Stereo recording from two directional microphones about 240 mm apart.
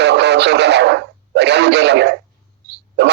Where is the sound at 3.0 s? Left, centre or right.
Right.